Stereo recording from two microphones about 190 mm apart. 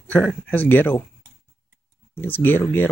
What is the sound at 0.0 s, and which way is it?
Speech, 10° left (ahead or behind).